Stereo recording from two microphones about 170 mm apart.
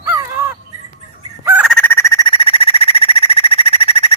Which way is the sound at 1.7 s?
10° left (ahead or behind).